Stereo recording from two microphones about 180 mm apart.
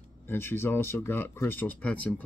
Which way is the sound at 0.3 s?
10° left (ahead or behind).